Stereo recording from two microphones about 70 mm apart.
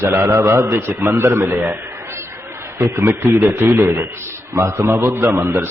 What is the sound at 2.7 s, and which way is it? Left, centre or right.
A man's voice, right.